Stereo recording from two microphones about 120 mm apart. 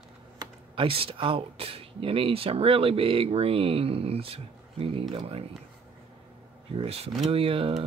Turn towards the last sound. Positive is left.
turn(degrees=-50)  # may be behind; listen again after turning